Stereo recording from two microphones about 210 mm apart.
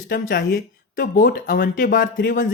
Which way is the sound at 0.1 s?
45° left (ahead or behind).